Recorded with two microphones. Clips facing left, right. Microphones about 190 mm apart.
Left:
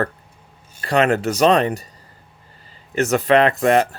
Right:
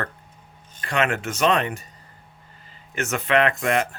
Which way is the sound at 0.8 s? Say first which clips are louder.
Left 7 dB; 35° left (ahead or behind).